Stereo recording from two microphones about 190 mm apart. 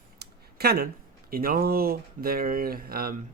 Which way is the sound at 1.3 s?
50° right (ahead or behind).